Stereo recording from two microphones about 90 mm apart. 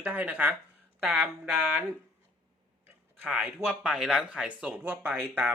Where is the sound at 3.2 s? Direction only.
15° right (ahead or behind).